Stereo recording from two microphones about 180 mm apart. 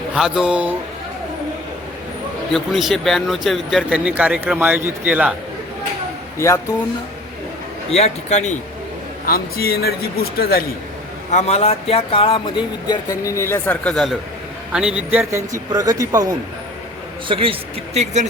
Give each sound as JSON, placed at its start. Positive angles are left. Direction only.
{"t": 0.1, "sound": "speech", "side_deg": -5}
{"t": 2.5, "sound": "speech", "side_deg": 0}
{"t": 6.4, "sound": "speech", "side_deg": 15}
{"t": 7.9, "sound": "a man's voice", "side_deg": 35}
{"t": 9.2, "sound": "a man's voice", "side_deg": 55}
{"t": 11.3, "sound": "speech", "side_deg": 40}
{"t": 17.2, "sound": "speech", "side_deg": -30}